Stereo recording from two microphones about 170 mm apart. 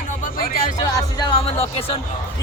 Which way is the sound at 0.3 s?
55° left (ahead or behind).